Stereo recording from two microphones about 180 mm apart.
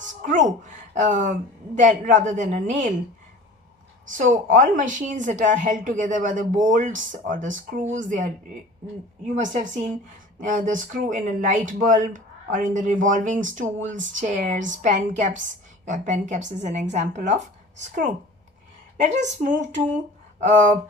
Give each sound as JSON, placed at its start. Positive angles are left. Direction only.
{"t": 0.2, "sound": "a woman's voice", "side_deg": -45}
{"t": 4.1, "sound": "a woman's voice", "side_deg": -45}
{"t": 9.3, "sound": "a woman's voice", "side_deg": -40}
{"t": 19.0, "sound": "a woman's voice", "side_deg": -40}